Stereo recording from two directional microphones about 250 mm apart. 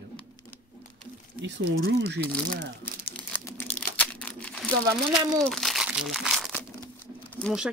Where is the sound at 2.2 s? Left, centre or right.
Centre.